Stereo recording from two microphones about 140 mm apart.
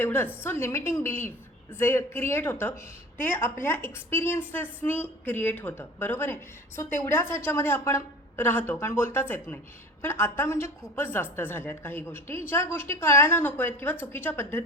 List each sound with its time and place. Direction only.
0.0 s a woman's voice: 15° left (ahead or behind)